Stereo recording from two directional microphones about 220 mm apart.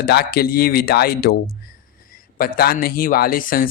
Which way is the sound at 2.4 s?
45° left (ahead or behind).